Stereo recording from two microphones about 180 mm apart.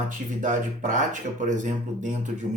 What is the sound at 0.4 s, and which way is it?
Speech, 45° right (ahead or behind).